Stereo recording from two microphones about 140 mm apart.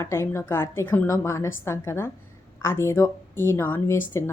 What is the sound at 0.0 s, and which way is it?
A woman's voice, 20° left (ahead or behind).